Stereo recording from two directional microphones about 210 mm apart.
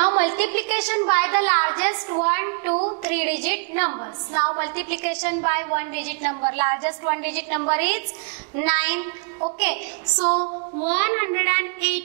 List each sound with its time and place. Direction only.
0.2 s a woman's voice: 15° right (ahead or behind)
2.7 s music: 30° right (ahead or behind)
3.1 s a woman's voice: 10° right (ahead or behind)
9.4 s a sound: 30° right (ahead or behind)
10.1 s female singing: 30° right (ahead or behind)
10.9 s a woman's voice: 15° right (ahead or behind)